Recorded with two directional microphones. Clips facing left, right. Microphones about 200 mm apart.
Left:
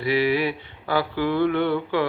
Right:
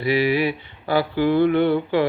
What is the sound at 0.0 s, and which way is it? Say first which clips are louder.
Mantra: right 2 dB; 15° right (ahead or behind).